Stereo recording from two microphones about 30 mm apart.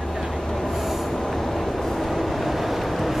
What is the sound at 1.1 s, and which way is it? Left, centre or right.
Vehicle, centre.